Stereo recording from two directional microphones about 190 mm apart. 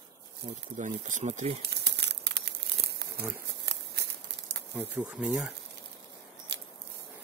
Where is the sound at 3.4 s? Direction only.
65° right (ahead or behind).